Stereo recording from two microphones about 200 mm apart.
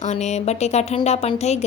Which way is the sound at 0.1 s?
35° left (ahead or behind).